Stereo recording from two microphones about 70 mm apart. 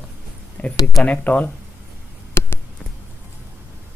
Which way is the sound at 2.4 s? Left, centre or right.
Left.